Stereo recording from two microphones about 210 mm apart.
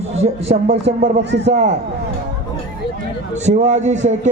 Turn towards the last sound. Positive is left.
turn(degrees=-35)  # may be behind; listen again after turning